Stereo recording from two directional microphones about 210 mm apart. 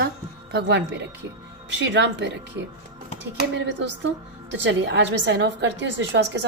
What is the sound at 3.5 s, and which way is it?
A woman's voice, 60° right (ahead or behind).